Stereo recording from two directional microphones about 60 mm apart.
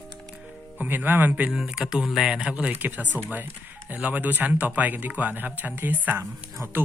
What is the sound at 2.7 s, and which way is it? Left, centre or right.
Speech, right.